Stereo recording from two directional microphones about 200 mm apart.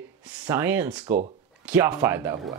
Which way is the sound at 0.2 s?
5° right (ahead or behind).